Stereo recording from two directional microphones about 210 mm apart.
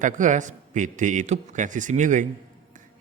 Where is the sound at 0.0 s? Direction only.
35° right (ahead or behind).